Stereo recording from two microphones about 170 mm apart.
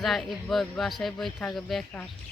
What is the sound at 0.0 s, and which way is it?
Speech, centre (ahead or behind).